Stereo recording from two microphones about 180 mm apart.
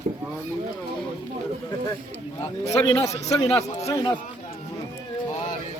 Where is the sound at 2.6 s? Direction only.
35° left (ahead or behind).